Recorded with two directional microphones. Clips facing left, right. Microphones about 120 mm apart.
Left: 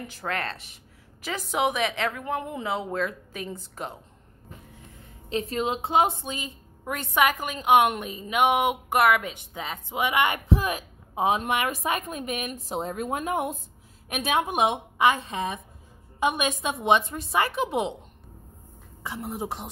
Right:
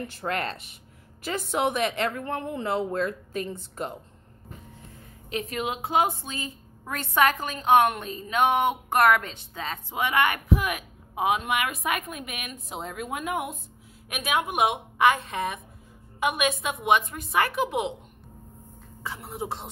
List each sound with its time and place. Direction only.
0.2 s speech: 10° right (ahead or behind)
1.2 s a woman's voice: centre (ahead or behind)
5.3 s a woman's voice: 30° left (ahead or behind)
15.0 s a woman's voice: 15° left (ahead or behind)
16.2 s a woman's voice: 30° left (ahead or behind)
19.0 s a woman's voice: 20° left (ahead or behind)